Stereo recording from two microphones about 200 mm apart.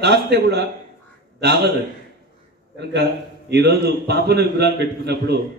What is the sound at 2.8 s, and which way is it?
A man's voice, 55° right (ahead or behind).